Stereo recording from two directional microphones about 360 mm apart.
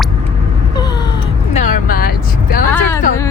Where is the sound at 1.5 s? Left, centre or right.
Left.